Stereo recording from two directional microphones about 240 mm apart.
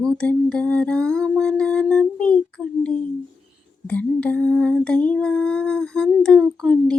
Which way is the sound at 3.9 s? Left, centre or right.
Centre.